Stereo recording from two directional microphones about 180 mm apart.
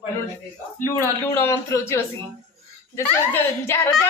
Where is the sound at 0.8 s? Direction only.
15° left (ahead or behind).